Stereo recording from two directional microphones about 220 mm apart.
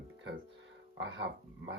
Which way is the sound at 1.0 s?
55° right (ahead or behind).